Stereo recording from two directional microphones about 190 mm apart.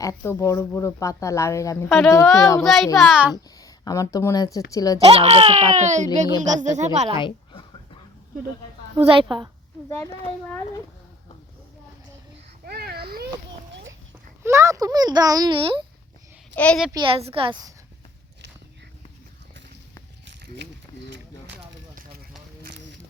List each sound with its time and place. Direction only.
0.0 s speech: 15° left (ahead or behind)
2.6 s a child's voice: centre (ahead or behind)
3.6 s speech: 15° left (ahead or behind)
4.9 s speech: 30° right (ahead or behind)
7.2 s a sound: 25° left (ahead or behind)
9.0 s a child's voice: 25° right (ahead or behind)
9.9 s speech: 15° left (ahead or behind)
12.6 s a sound: 55° right (ahead or behind)
14.4 s a child's voice: 15° right (ahead or behind)
16.6 s a child's voice: 5° left (ahead or behind)
16.9 s a child's voice: 25° right (ahead or behind)